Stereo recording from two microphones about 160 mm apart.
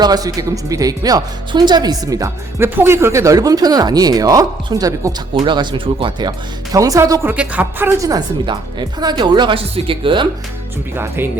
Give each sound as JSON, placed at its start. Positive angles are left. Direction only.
{"t": 0.0, "sound": "speech", "side_deg": -25}
{"t": 10.9, "sound": "speech", "side_deg": -15}